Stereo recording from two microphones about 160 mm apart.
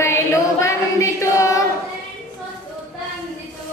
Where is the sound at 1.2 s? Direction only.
20° left (ahead or behind).